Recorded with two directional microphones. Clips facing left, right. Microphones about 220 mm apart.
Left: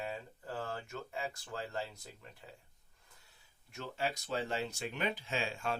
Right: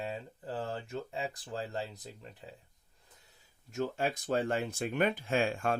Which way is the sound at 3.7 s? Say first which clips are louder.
Right 6 dB; 45° right (ahead or behind).